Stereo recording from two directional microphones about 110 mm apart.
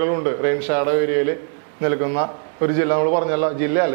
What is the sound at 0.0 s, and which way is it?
A man's voice, 25° right (ahead or behind).